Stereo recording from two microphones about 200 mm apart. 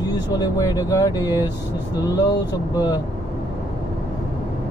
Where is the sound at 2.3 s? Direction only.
20° left (ahead or behind).